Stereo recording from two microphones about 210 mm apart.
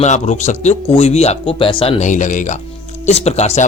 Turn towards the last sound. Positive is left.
turn(degrees=30)  # may be behind; listen again after turning